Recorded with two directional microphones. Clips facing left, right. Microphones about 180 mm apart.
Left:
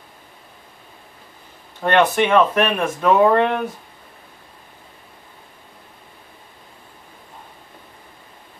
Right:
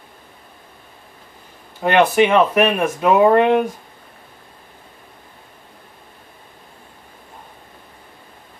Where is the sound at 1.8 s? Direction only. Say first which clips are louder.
Right 2 dB; 10° right (ahead or behind).